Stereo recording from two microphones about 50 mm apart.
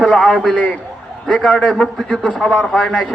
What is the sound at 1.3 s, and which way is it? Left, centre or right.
A man's voice, left.